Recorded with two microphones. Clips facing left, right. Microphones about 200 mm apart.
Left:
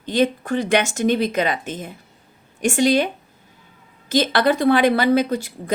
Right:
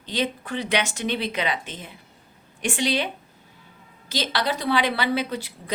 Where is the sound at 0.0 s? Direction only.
50° left (ahead or behind).